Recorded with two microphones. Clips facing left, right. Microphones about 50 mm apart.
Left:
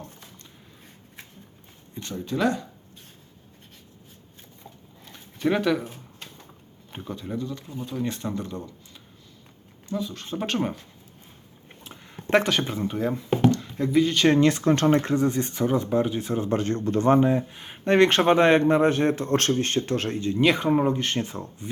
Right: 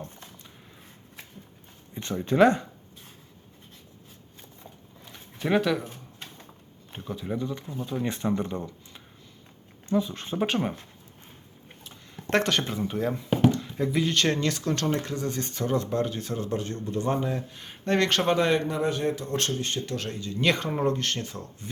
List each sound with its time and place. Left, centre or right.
2.0 s speech: right
5.0 s zipper: centre
6.9 s speech: centre
7.3 s speech: right
9.9 s speech: right
11.9 s speech: centre
14.3 s speech: left
16.6 s a man's voice: left
17.1 s speech: left
20.4 s speech: centre; by 21.5 s left